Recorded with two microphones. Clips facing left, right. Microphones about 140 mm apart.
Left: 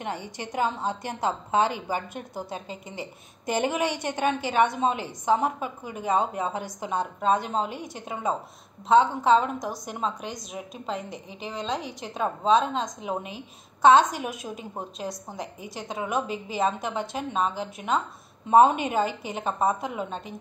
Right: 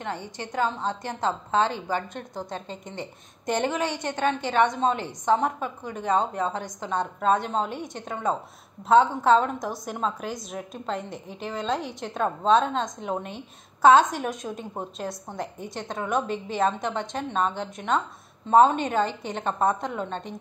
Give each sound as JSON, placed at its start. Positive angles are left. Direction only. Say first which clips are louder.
{"t": 0.0, "sound": "a woman's voice", "louder": "even", "side_deg": 15}